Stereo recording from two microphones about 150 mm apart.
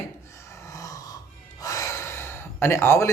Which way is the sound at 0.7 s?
20° left (ahead or behind).